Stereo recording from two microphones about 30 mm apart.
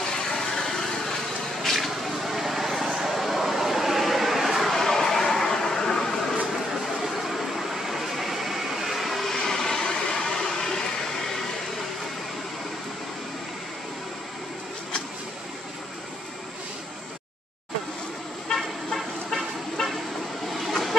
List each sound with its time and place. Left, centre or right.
0.0 s vehicle: centre
1.6 s vehicle: centre
4.7 s vehicle: centre
6.5 s vehicle: centre
9.3 s vehicle: centre
18.9 s vehicle: centre